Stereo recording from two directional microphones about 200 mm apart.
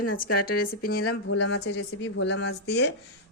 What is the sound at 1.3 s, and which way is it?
Speech, 65° left (ahead or behind).